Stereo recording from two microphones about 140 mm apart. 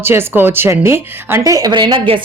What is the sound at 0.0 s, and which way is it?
Speech, 15° right (ahead or behind).